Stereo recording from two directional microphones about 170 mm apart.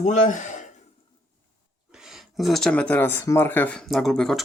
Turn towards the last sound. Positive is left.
turn(degrees=5)  # may be behind; listen again after turning